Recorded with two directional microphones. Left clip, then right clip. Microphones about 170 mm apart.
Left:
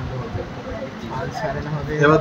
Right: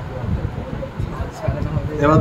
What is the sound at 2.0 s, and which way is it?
Speech, 50° right (ahead or behind).